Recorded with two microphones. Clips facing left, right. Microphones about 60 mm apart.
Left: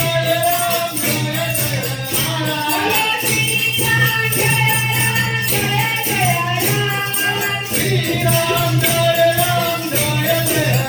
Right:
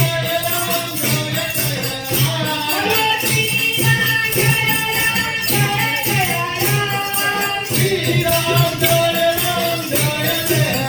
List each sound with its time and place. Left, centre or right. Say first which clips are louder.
0.4 s music: left 4 dB; centre
2.7 s music: right 1 dB; centre
7.8 s music: right 2 dB; centre